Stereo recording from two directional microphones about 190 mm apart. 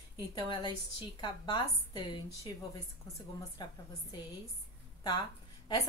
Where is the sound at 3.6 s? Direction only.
25° left (ahead or behind).